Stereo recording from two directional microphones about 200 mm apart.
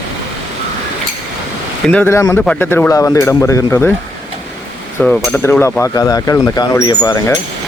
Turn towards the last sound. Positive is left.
turn(degrees=20)  # may be behind; listen again after turning